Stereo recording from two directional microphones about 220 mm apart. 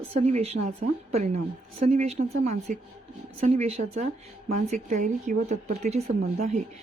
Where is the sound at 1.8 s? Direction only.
30° right (ahead or behind).